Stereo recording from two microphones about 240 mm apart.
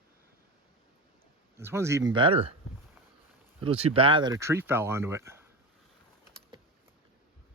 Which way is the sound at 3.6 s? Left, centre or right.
Right.